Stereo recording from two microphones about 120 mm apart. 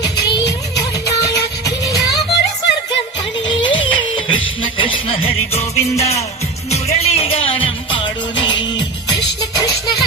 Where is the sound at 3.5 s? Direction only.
40° left (ahead or behind).